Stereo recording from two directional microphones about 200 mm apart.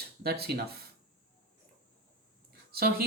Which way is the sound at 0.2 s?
50° right (ahead or behind).